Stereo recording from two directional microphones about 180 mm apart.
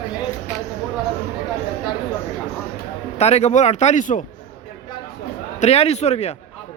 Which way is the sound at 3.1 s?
35° left (ahead or behind).